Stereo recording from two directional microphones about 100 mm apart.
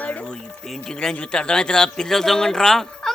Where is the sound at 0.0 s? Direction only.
15° left (ahead or behind).